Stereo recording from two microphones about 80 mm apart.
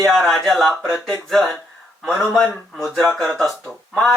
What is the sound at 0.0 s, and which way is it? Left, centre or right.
Speech, centre.